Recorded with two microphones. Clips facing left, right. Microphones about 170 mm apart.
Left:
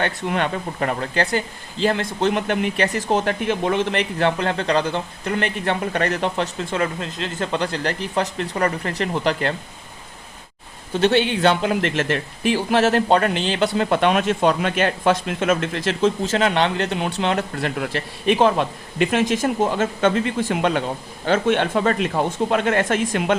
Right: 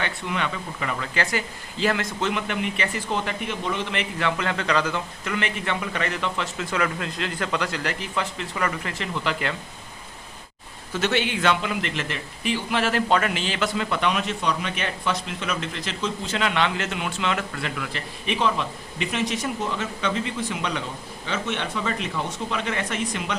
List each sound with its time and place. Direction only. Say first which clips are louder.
0.0 s a man's voice: left 6 dB; 50° left (ahead or behind); by 2.3 s 30° left (ahead or behind)
2.3 s speech: left 6 dB; 40° left (ahead or behind)
3.5 s a man's voice: left 8 dB; 60° left (ahead or behind)
3.9 s speech: left 6 dB; 35° left (ahead or behind)
10.9 s speech: left 6 dB; 30° left (ahead or behind)
18.3 s speech: left 5 dB; 50° left (ahead or behind); by 19.4 s 75° left (ahead or behind)
19.4 s speech: left 8 dB; 50° left (ahead or behind)